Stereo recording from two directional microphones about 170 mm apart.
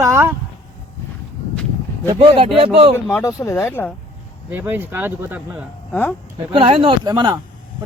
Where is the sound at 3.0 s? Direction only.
15° left (ahead or behind).